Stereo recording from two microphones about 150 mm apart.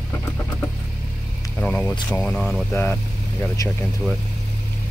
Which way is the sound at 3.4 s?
20° left (ahead or behind).